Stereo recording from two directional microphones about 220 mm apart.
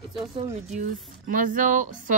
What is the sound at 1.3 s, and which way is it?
Speech, 35° right (ahead or behind).